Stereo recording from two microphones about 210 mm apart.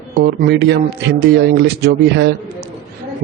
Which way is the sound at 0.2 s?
55° right (ahead or behind).